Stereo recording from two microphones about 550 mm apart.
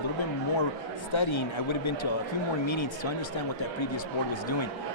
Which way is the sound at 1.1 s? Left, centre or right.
Left.